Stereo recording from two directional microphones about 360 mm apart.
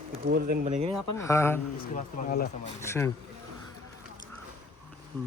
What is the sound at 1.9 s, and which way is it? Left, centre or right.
Speech, left.